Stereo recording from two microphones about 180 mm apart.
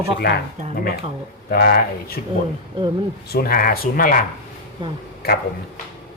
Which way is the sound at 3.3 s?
60° left (ahead or behind).